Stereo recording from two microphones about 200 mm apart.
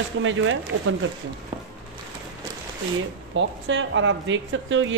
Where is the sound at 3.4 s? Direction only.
65° right (ahead or behind).